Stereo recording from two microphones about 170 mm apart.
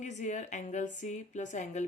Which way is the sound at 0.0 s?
45° left (ahead or behind).